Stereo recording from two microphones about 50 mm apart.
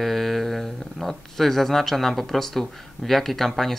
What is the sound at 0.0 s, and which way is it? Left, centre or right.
Speech, centre.